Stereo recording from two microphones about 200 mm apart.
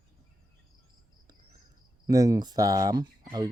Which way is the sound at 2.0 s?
15° right (ahead or behind).